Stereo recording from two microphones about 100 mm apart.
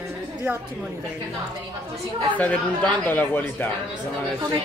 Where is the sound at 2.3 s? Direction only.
15° left (ahead or behind).